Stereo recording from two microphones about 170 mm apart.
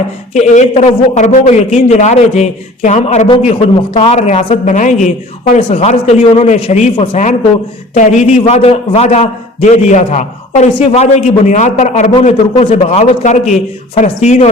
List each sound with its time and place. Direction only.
0.3 s a man's voice: 45° left (ahead or behind)